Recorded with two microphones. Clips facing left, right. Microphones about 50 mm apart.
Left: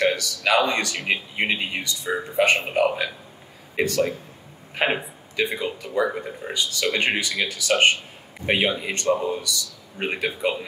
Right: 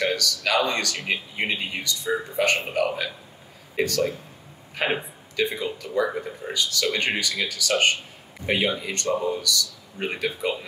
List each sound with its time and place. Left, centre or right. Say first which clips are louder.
0.0 s speech: left 3 dB; left